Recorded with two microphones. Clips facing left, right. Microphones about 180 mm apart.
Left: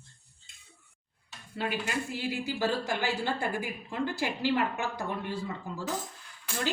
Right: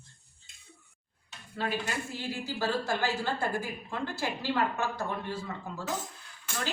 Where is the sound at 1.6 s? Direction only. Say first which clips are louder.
Left 1 dB; 15° left (ahead or behind).